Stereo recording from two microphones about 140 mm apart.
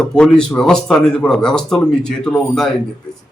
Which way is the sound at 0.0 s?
5° left (ahead or behind).